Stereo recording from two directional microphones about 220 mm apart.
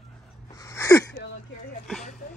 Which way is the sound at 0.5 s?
15° left (ahead or behind).